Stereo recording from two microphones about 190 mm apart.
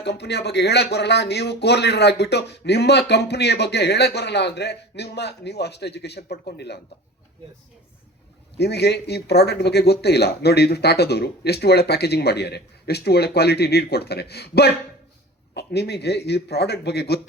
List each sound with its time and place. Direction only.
0.0 s speech: 60° left (ahead or behind)
8.5 s speech: 60° left (ahead or behind)